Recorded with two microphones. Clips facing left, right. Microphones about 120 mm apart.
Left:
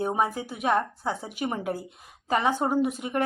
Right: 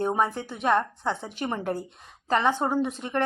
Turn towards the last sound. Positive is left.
turn(degrees=10)  # may be behind; listen again after turning